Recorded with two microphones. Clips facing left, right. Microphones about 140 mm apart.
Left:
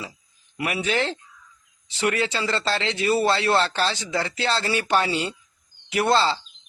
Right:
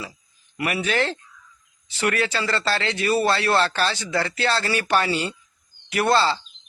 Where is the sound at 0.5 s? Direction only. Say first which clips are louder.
Right 1 dB; 15° left (ahead or behind).